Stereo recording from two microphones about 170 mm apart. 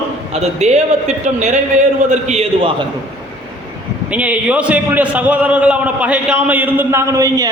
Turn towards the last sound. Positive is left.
turn(degrees=-15)  # may be behind; listen again after turning